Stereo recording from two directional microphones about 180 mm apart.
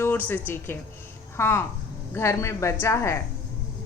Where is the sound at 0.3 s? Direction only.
10° left (ahead or behind).